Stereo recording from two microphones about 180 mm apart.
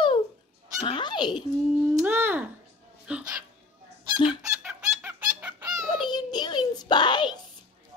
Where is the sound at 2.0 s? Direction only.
10° right (ahead or behind).